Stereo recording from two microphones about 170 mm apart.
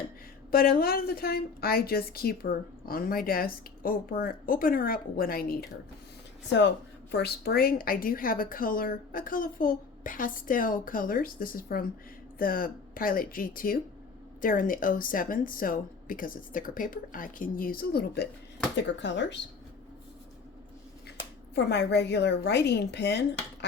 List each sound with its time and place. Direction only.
0.5 s speech: 60° left (ahead or behind)
6.5 s speech: 90° left; by 18.3 s 65° left (ahead or behind)
18.8 s speech: 90° left
21.5 s a woman's voice: 75° left (ahead or behind)